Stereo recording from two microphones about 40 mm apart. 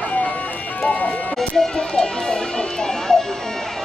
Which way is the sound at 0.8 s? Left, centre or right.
Left.